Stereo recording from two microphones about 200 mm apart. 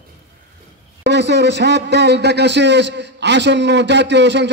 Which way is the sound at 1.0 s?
60° right (ahead or behind).